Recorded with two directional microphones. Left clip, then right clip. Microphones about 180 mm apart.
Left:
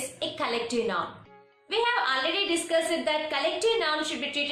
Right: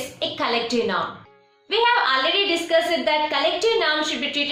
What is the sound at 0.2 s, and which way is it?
A woman's voice, 15° left (ahead or behind).